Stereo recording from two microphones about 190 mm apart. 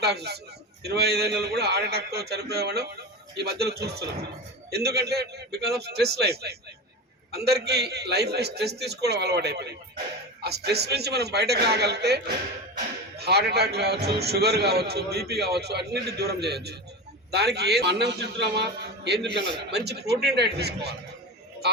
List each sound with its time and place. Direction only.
0.0 s a man's voice: 60° right (ahead or behind)